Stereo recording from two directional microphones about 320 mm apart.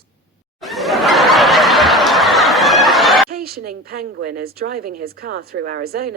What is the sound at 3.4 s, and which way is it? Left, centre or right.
Speech, right.